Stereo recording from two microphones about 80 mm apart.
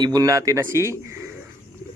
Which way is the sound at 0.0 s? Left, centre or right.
Right.